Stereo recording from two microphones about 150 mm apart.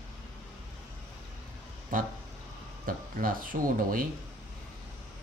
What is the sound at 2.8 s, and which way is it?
Speech, 65° right (ahead or behind).